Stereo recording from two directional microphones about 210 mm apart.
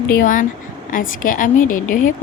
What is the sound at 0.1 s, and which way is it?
A woman's voice, 40° left (ahead or behind).